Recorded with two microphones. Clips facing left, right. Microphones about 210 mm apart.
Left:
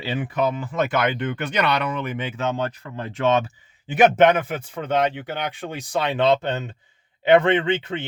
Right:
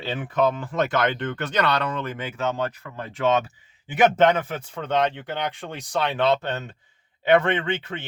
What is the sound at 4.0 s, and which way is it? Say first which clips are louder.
Speech: left 3 dB; 10° left (ahead or behind).